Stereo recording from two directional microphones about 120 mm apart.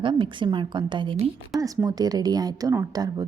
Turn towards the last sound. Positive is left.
turn(degrees=-35)  # may be behind; listen again after turning